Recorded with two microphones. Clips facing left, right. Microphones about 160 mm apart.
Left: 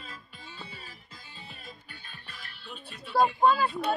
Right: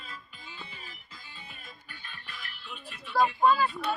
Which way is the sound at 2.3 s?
35° left (ahead or behind).